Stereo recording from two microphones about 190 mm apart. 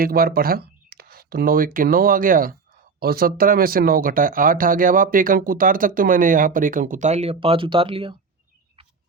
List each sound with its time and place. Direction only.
0.0 s speech: 50° right (ahead or behind); by 8.1 s 30° right (ahead or behind)